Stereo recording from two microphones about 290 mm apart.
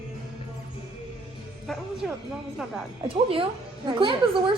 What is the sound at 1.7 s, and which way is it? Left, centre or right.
Speech, centre.